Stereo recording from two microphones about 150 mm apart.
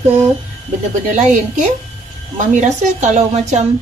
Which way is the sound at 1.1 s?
55° right (ahead or behind).